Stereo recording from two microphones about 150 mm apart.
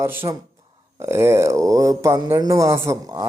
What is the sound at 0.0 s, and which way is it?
Speech, 15° right (ahead or behind).